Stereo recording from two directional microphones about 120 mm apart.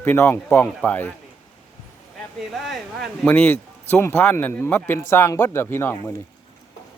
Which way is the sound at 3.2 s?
15° left (ahead or behind).